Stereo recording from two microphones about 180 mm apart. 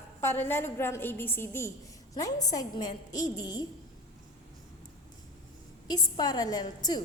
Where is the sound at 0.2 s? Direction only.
15° left (ahead or behind).